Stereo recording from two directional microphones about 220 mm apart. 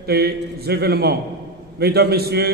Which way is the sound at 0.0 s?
45° right (ahead or behind).